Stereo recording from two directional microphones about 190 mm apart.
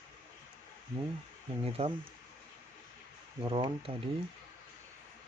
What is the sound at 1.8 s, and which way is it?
Speech, 30° right (ahead or behind).